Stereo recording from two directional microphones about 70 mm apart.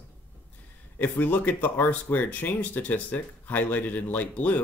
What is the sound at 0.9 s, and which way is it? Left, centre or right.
Speech, left.